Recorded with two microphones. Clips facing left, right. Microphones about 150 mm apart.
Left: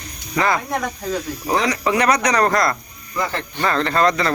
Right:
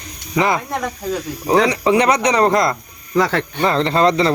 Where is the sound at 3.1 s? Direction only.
85° right.